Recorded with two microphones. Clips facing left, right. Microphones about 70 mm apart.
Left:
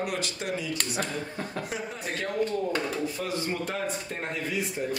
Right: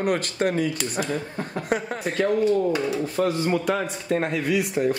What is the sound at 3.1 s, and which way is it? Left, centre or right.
Speech, right.